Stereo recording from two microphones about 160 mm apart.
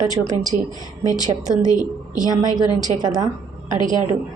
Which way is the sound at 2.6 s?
25° right (ahead or behind).